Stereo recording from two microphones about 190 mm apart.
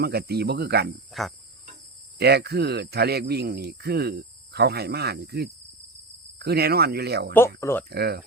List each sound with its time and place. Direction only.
0.0 s speech: 60° right (ahead or behind)
1.2 s cricket: centre (ahead or behind)
2.1 s speech: 60° right (ahead or behind)
7.6 s speech: 15° left (ahead or behind)
7.9 s speech: 55° right (ahead or behind)